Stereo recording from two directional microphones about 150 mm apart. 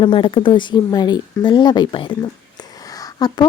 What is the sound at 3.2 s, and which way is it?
Speech, 25° left (ahead or behind).